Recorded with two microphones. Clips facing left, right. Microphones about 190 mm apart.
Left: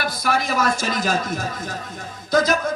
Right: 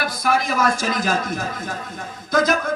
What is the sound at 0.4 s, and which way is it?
A man's voice, 50° right (ahead or behind).